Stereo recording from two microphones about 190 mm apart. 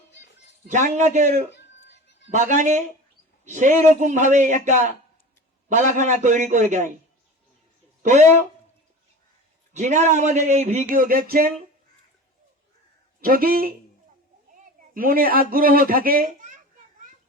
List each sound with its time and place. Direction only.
0.7 s a man's voice: 40° right (ahead or behind)
1.9 s music: 70° left (ahead or behind)
2.3 s a man's voice: 40° right (ahead or behind)
8.0 s speech: 40° right (ahead or behind)
9.7 s a man's voice: 40° right (ahead or behind)
10.9 s a sound: 50° right (ahead or behind)
13.2 s a sound: 50° right (ahead or behind)
14.6 s a man's voice: 50° right (ahead or behind)